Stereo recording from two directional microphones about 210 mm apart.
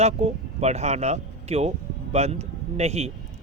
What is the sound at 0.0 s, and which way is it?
A man's voice, 30° right (ahead or behind).